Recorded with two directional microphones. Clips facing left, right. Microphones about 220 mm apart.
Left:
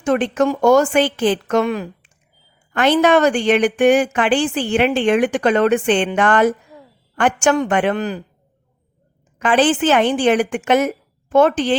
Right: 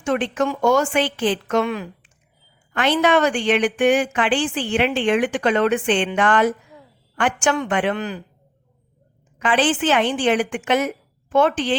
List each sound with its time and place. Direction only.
0.0 s a woman's voice: 40° left (ahead or behind)
9.4 s a woman's voice: 45° left (ahead or behind)